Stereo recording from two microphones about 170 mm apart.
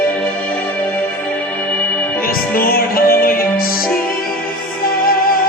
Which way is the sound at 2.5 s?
60° left (ahead or behind).